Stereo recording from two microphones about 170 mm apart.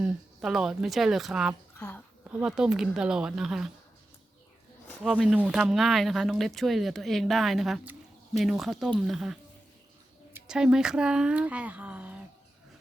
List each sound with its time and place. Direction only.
0.0 s speech: 5° right (ahead or behind)
1.7 s a sound: 10° left (ahead or behind)
2.4 s speech: 5° right (ahead or behind)
5.0 s speech: 5° right (ahead or behind)